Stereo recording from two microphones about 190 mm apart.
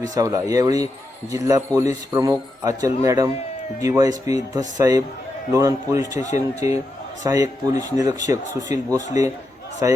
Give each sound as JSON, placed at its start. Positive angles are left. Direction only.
{"t": 0.0, "sound": "a man's voice", "side_deg": -20}